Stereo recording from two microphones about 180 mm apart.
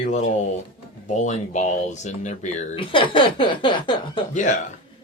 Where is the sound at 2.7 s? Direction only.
30° left (ahead or behind).